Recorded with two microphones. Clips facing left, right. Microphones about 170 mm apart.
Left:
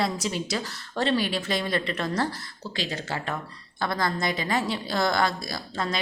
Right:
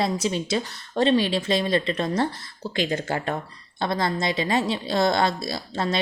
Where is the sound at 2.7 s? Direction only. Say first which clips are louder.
Right 6 dB; 50° right (ahead or behind).